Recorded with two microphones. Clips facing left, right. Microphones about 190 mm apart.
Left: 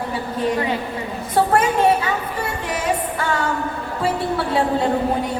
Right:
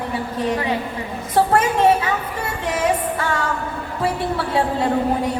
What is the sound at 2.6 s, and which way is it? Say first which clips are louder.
Music: right 4 dB; 25° right (ahead or behind).